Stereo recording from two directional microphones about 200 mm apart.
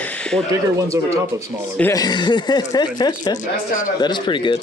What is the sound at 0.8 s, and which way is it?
Speech, 15° right (ahead or behind).